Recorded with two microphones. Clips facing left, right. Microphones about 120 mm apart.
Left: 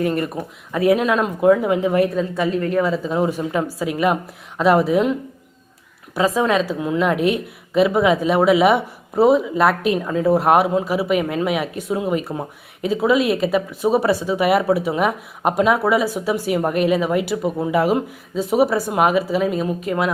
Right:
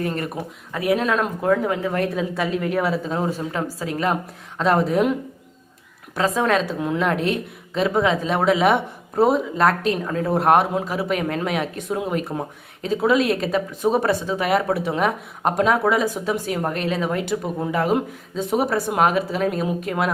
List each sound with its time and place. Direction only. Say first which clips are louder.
0.7 s speech: left 5 dB; 25° left (ahead or behind)
0.9 s speech: left 3 dB; 5° left (ahead or behind)
2.3 s a woman's voice: left 3 dB; centre (ahead or behind)
3.2 s speech: left 4 dB; 15° left (ahead or behind)
6.1 s a woman's voice: left 2 dB; 10° left (ahead or behind)